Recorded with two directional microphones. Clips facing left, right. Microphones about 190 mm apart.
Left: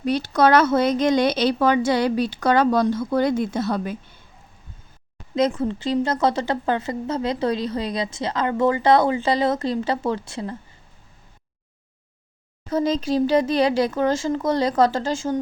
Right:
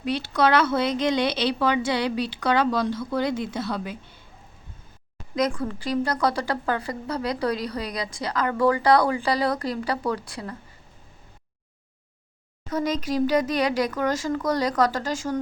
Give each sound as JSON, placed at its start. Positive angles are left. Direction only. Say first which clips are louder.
{"t": 0.0, "sound": "a woman's voice", "louder": "left 4 dB", "side_deg": 45}
{"t": 5.3, "sound": "a woman's voice", "louder": "left 4 dB", "side_deg": 25}
{"t": 12.7, "sound": "a woman's voice", "louder": "left 4 dB", "side_deg": 30}